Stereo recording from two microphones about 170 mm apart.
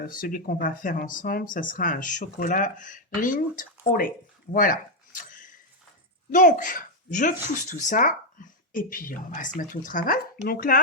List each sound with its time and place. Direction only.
0.0 s speech: 55° left (ahead or behind)
4.5 s a sound: 55° left (ahead or behind)
6.3 s speech: 50° left (ahead or behind)